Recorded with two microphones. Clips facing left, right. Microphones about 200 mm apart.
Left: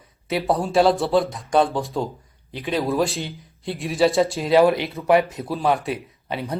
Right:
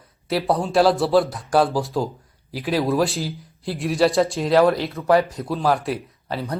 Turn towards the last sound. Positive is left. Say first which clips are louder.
# even
turn(degrees=0)  # may be behind; listen again after turning